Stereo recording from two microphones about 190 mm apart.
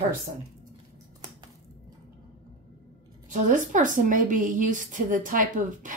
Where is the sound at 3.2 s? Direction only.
45° right (ahead or behind).